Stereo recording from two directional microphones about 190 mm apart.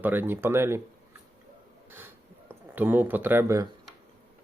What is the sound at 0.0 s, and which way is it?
Speech, 10° right (ahead or behind).